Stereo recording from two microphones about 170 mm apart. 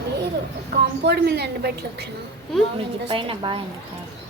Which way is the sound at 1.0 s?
75° right (ahead or behind).